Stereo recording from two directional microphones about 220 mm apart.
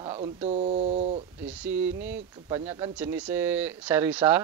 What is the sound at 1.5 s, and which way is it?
Speech, 5° right (ahead or behind).